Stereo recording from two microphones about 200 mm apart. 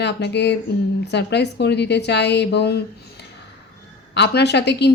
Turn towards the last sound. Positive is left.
turn(degrees=55)  # may be behind; listen again after turning